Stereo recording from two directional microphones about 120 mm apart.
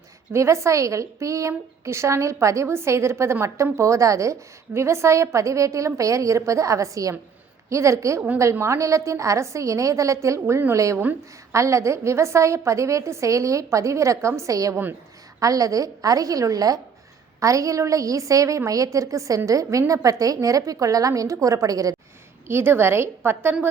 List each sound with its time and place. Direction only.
0.3 s a woman's voice: 25° right (ahead or behind)
22.4 s a woman's voice: 20° right (ahead or behind)